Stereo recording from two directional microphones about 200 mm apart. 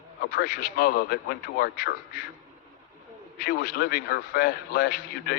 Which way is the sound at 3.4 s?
50° left (ahead or behind).